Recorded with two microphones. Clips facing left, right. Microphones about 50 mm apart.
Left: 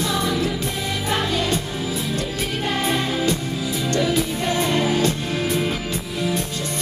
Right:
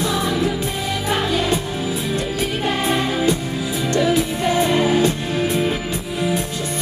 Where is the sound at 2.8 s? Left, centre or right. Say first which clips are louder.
Right 2 dB; centre.